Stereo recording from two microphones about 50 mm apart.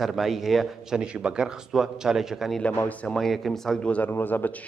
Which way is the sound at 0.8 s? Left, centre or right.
Centre.